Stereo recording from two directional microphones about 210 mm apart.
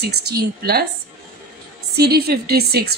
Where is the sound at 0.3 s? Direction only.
50° right (ahead or behind).